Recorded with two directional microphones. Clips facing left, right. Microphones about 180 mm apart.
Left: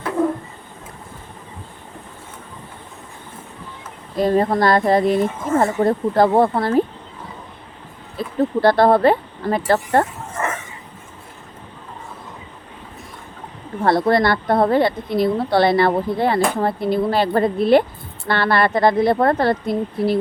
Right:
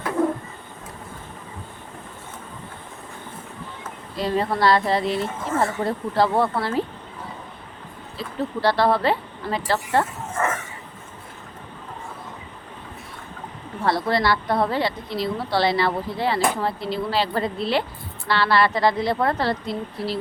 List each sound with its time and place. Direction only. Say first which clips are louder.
4.2 s a woman's voice: left 5 dB; 50° left (ahead or behind)
8.2 s a woman's voice: left 7 dB; 50° left (ahead or behind)
13.8 s a woman's voice: left 5 dB; 55° left (ahead or behind)